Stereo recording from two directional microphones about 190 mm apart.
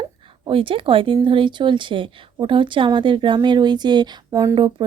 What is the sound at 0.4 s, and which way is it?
Speech, 25° right (ahead or behind).